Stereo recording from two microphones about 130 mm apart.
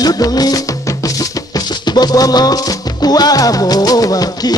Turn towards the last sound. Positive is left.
turn(degrees=30)  # may be behind; listen again after turning